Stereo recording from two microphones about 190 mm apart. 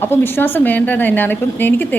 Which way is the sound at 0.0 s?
10° left (ahead or behind).